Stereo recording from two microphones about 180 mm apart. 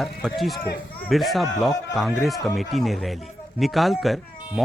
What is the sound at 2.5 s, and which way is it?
Speech, centre (ahead or behind).